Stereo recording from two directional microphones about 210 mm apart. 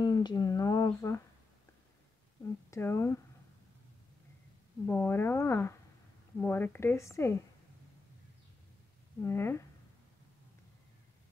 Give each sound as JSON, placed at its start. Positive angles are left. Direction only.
{"t": 0.0, "sound": "speech", "side_deg": 20}
{"t": 2.7, "sound": "speech", "side_deg": 15}
{"t": 4.8, "sound": "speech", "side_deg": 10}
{"t": 9.2, "sound": "speech", "side_deg": 10}